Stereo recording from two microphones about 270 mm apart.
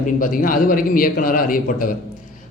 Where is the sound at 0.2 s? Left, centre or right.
Left.